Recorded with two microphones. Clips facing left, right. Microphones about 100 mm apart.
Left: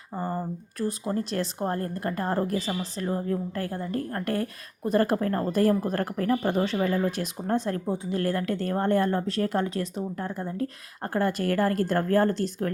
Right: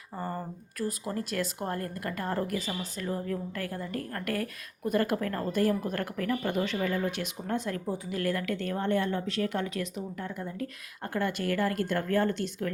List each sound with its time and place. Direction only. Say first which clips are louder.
0.2 s speech: left 5 dB; 20° left (ahead or behind); by 12.7 s 40° left (ahead or behind)